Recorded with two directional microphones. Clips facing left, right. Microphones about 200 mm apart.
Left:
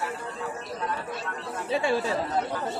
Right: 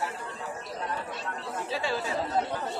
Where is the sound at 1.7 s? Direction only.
25° left (ahead or behind).